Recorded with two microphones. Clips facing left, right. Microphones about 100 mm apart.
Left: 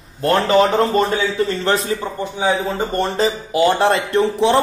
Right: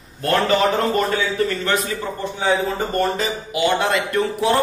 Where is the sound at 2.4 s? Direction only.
15° left (ahead or behind).